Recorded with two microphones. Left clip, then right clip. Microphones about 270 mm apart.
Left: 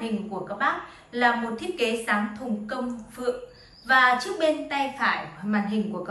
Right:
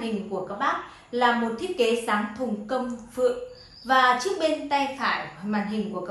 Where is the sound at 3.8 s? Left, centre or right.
Centre.